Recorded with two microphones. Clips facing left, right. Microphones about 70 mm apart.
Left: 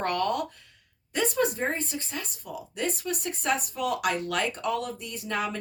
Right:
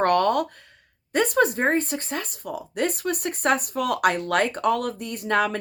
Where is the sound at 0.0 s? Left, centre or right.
Right.